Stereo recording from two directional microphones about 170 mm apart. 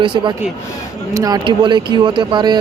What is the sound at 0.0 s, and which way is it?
Speech, 30° right (ahead or behind).